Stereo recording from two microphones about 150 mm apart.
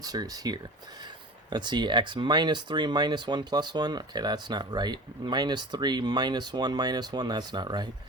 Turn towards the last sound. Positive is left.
turn(degrees=-30)  # may be behind; listen again after turning